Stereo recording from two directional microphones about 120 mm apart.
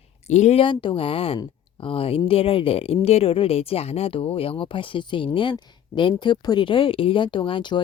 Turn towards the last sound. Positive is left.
turn(degrees=45)  # may be behind; listen again after turning